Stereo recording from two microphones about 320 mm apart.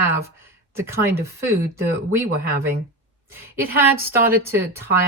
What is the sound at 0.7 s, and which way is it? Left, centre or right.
Speech, centre.